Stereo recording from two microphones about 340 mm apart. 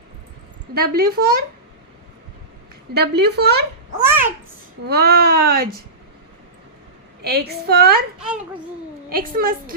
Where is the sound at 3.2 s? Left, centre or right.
Right.